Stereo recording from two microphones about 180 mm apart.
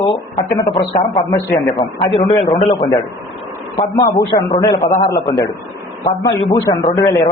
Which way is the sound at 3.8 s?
20° left (ahead or behind).